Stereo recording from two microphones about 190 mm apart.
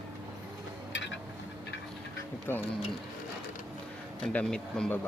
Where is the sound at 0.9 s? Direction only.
75° left (ahead or behind).